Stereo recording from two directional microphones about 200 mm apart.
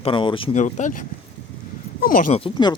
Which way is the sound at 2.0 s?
45° left (ahead or behind).